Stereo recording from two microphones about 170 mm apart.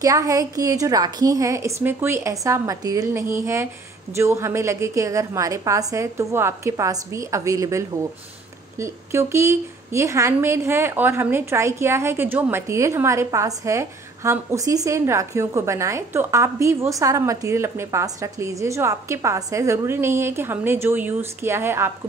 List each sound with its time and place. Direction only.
0.0 s a woman's voice: 20° right (ahead or behind)